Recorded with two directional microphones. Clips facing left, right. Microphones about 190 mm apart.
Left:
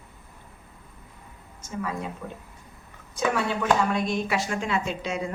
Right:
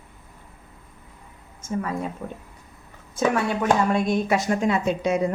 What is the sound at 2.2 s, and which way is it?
Speech, 40° right (ahead or behind).